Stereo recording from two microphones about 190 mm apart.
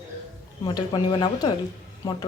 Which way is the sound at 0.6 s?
25° left (ahead or behind).